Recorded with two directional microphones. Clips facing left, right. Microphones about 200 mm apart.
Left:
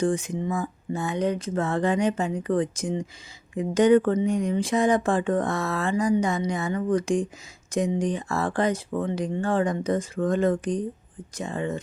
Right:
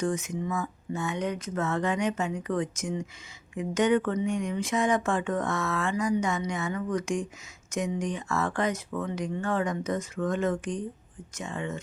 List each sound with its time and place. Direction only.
0.0 s speech: 30° left (ahead or behind)